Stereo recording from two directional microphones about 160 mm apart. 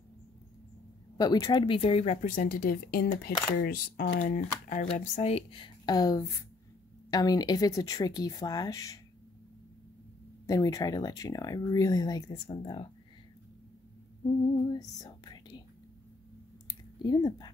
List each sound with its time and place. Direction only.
1.1 s speech: 25° left (ahead or behind); by 4.1 s 80° left
4.2 s speech: 50° left (ahead or behind); by 9.0 s 20° left (ahead or behind)
10.4 s speech: 20° left (ahead or behind)
14.7 s whispering: 25° left (ahead or behind)
16.6 s a sound: 25° left (ahead or behind)